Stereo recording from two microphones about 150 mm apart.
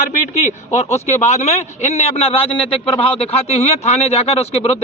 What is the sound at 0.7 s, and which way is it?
Speech, 50° left (ahead or behind).